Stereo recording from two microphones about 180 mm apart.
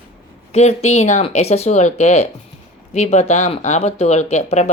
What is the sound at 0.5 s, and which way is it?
Speech, 35° left (ahead or behind).